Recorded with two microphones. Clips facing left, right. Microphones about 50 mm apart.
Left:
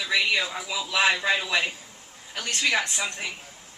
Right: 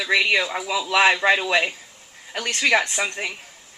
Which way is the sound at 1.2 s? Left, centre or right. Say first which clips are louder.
Right 6 dB; right.